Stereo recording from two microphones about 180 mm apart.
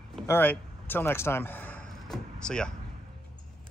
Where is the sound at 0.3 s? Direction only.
10° left (ahead or behind).